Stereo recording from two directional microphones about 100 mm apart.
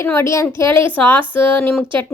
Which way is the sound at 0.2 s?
30° left (ahead or behind).